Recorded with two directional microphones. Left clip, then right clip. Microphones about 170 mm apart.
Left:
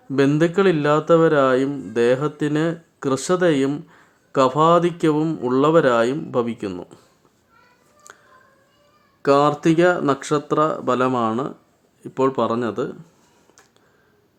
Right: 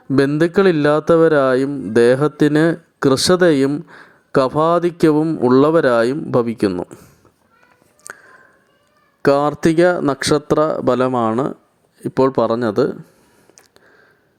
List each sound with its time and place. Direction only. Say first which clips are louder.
0.3 s speech: right 3 dB; 35° right (ahead or behind)
5.2 s speech: right 6 dB; 20° right (ahead or behind)
5.5 s speech: right 3 dB; 35° right (ahead or behind)
6.7 s speech: right 9 dB; 20° right (ahead or behind)
8.1 s music: right 10 dB; 30° right (ahead or behind)
9.2 s speech: right 2 dB; 35° right (ahead or behind)